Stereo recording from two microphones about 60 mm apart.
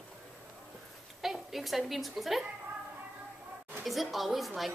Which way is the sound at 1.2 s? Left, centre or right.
Centre.